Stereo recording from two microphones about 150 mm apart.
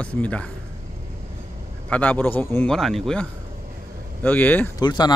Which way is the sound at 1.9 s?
10° left (ahead or behind).